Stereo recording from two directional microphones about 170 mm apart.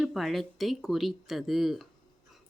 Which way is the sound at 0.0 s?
Centre (ahead or behind).